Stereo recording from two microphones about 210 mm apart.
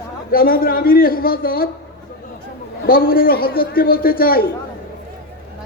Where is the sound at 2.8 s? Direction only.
45° left (ahead or behind).